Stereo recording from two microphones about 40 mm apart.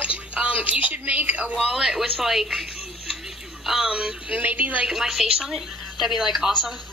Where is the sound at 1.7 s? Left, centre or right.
Centre.